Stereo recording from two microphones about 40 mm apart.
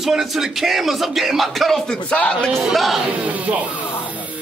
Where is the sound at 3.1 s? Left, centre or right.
Right.